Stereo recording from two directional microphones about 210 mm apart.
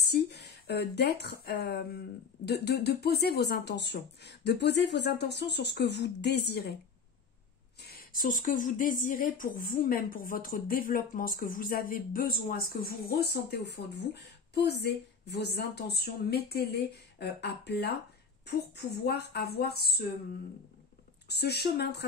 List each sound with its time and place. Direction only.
0.0 s speech: 50° left (ahead or behind)
7.8 s speech: 45° left (ahead or behind)
21.3 s speech: 50° left (ahead or behind)